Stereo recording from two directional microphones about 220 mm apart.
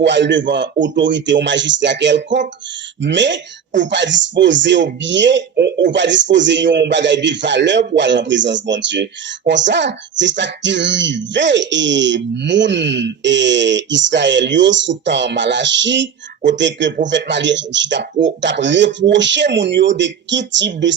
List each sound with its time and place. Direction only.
0.0 s a man's voice: 55° right (ahead or behind)